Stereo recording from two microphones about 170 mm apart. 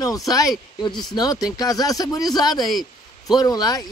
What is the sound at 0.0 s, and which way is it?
Speech, 20° left (ahead or behind).